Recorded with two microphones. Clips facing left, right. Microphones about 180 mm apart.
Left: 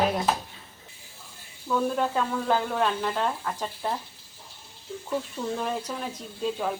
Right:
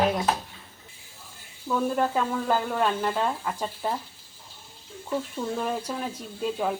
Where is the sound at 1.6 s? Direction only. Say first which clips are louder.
Right 1 dB; 5° right (ahead or behind).